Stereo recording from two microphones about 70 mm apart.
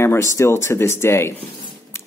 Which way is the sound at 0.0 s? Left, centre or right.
Left.